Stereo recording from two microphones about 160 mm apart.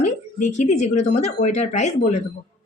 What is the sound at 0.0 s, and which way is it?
Speech, 45° left (ahead or behind).